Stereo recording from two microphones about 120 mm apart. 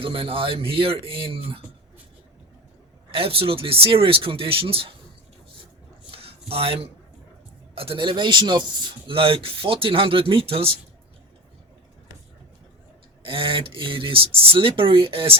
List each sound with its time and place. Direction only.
0.0 s speech: 50° right (ahead or behind)
3.1 s speech: 50° right (ahead or behind)
6.1 s a sound: 50° right (ahead or behind)
7.8 s speech: 45° right (ahead or behind)
13.2 s speech: 50° right (ahead or behind)